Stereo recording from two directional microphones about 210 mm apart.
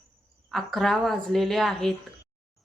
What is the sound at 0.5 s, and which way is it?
A woman's voice, centre (ahead or behind).